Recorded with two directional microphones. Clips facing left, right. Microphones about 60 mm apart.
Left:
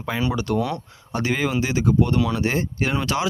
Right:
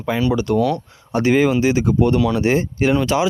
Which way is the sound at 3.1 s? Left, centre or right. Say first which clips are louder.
Right 6 dB; centre.